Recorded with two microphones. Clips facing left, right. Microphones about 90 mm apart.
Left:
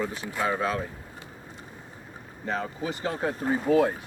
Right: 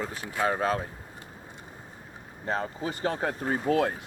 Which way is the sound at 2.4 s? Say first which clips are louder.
Even; 40° right (ahead or behind).